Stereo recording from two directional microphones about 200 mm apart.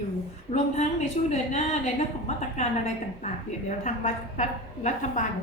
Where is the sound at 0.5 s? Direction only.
35° left (ahead or behind).